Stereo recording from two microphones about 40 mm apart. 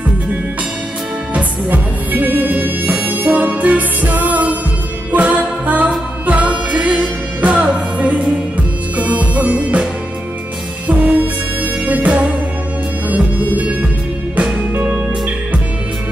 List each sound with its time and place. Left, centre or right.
1.3 s music: right
10.9 s music: right